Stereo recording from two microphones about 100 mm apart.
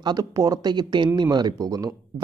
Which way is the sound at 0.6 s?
50° right (ahead or behind).